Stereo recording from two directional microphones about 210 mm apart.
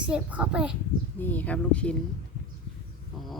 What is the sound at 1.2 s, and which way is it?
Speech, 10° left (ahead or behind).